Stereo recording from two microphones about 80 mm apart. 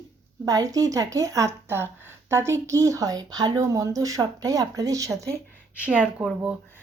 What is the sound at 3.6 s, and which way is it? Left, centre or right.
Speech, right.